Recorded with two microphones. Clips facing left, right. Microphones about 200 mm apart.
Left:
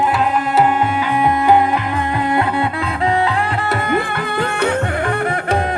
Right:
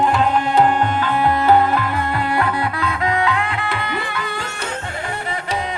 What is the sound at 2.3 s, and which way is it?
Music, 25° left (ahead or behind).